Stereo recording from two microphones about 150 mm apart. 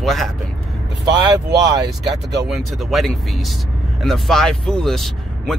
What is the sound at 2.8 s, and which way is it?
Speech, centre (ahead or behind).